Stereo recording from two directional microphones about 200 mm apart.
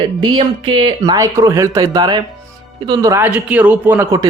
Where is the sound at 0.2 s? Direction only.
25° right (ahead or behind).